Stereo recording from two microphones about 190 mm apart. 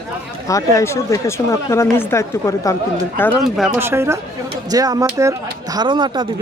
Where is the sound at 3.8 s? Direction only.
15° right (ahead or behind).